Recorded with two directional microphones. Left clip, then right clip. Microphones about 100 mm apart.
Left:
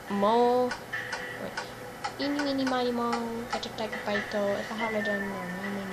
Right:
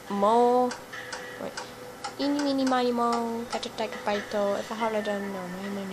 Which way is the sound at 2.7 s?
65° right (ahead or behind).